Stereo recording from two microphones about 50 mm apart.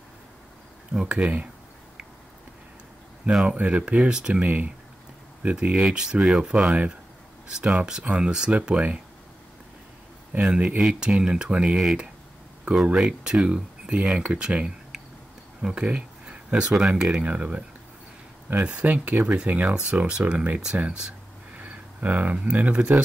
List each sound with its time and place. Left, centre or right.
1.0 s speech: right
3.4 s speech: right
10.4 s speech: centre
17.2 s speech: right
21.5 s speech: right